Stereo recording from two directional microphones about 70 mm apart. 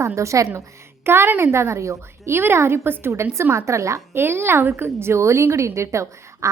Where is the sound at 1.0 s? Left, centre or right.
Right.